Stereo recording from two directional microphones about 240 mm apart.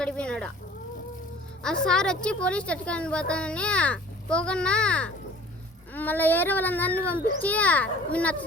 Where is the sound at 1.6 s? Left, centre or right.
Centre.